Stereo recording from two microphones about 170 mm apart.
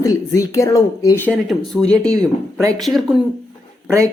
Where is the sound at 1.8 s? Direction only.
5° left (ahead or behind).